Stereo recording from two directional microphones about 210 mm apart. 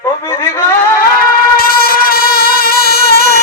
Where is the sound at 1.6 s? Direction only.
45° left (ahead or behind).